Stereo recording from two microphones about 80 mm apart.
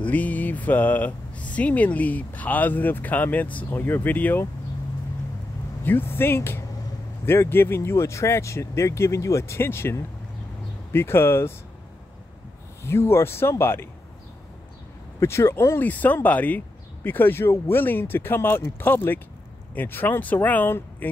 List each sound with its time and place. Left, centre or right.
0.0 s speech: centre
5.9 s speech: left
12.8 s speech: left
15.1 s speech: left
15.9 s speech: left